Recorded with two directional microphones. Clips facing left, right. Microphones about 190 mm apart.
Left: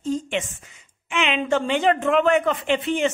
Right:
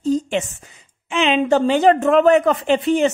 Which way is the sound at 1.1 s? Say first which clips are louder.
Right 6 dB; 35° right (ahead or behind).